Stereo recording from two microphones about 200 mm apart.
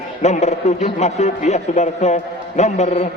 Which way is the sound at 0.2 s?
35° left (ahead or behind).